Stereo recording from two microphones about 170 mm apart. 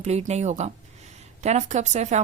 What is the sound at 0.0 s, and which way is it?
A woman's voice, 40° right (ahead or behind).